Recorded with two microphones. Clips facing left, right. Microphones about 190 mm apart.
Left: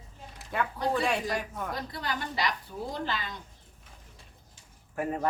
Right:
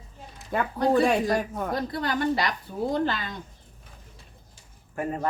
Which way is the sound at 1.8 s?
55° right (ahead or behind).